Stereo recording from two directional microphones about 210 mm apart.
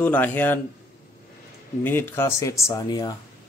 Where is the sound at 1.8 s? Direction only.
10° left (ahead or behind).